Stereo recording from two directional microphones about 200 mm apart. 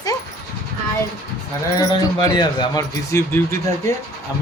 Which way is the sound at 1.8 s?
20° left (ahead or behind).